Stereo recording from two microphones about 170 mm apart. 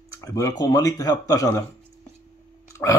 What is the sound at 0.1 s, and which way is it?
Speech, 20° left (ahead or behind).